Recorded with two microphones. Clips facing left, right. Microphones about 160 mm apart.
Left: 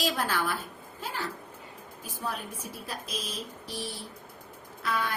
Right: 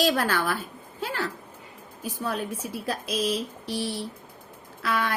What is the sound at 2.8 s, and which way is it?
A woman's voice, 80° right.